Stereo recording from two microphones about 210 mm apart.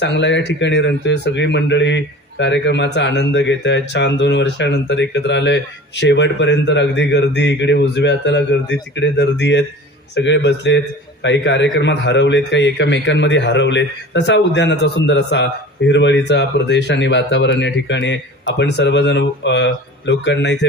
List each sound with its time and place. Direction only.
0.0 s speech: 55° left (ahead or behind)